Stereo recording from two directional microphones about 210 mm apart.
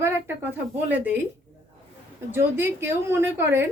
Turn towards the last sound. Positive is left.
turn(degrees=-10)  # may be behind; listen again after turning